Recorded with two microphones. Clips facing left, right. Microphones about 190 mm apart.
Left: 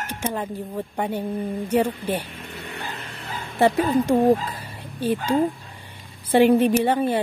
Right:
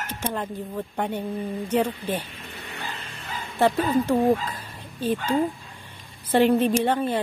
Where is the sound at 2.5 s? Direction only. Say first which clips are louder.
Left 2 dB; 60° left (ahead or behind).